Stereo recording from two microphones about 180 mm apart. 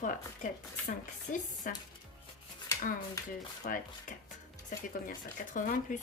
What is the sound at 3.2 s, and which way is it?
Speech, 20° left (ahead or behind).